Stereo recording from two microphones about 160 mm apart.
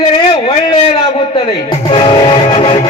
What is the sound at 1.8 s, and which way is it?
Music, 30° left (ahead or behind).